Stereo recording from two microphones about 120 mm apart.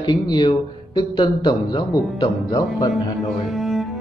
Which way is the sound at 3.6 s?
Centre (ahead or behind).